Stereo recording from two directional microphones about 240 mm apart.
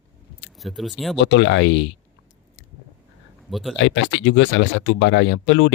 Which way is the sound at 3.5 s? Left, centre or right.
Centre.